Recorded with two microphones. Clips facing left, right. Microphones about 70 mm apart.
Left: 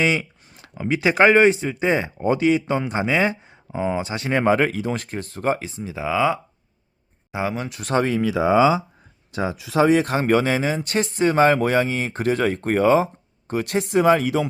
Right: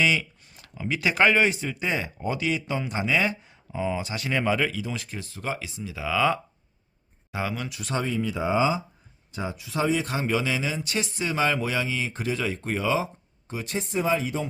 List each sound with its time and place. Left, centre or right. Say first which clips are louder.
0.0 s a sound: left 3 dB; left
0.8 s speech: left 6 dB; left
7.8 s speech: left 8 dB; left
13.5 s speech: left 9 dB; left